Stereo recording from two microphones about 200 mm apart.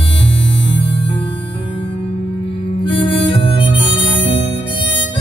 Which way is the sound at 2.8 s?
25° left (ahead or behind).